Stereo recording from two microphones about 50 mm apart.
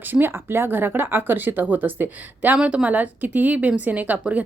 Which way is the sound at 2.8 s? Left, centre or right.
Right.